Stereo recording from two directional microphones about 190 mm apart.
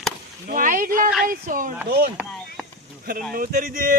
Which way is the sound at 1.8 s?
55° right (ahead or behind).